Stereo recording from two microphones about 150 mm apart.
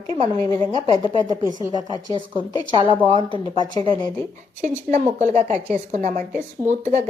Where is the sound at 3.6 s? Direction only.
30° left (ahead or behind).